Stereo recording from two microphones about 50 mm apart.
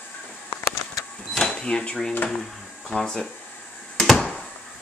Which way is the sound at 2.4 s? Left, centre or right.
Centre.